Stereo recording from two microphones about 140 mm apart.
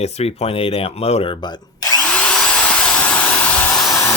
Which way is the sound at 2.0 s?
10° left (ahead or behind).